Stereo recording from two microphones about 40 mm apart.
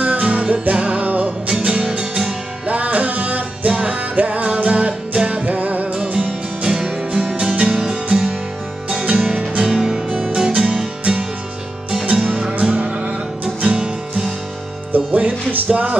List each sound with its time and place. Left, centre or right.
0.0 s music: right
1.5 s music: right
2.6 s music: right
5.4 s music: right
6.6 s music: centre
15.0 s music: right